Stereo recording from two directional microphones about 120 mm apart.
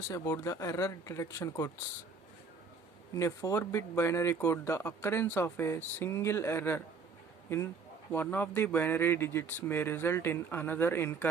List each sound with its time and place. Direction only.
0.1 s speech: 30° left (ahead or behind)
3.2 s speech: 25° left (ahead or behind)